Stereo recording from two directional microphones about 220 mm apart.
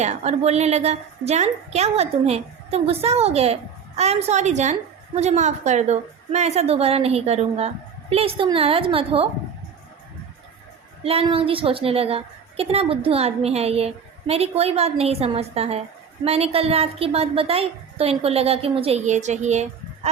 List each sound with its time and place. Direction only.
0.0 s a woman's voice: 30° right (ahead or behind)
11.0 s a woman's voice: 25° right (ahead or behind)